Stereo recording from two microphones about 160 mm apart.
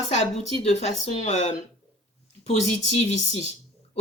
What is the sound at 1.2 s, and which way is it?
Speech, 45° left (ahead or behind).